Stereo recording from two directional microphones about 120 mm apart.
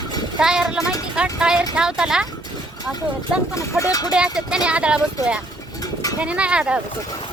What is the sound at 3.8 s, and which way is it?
Speech, 30° left (ahead or behind).